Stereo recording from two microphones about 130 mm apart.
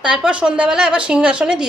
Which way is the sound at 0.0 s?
10° right (ahead or behind).